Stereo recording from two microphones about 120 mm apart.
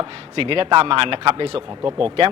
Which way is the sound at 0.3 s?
50° right (ahead or behind).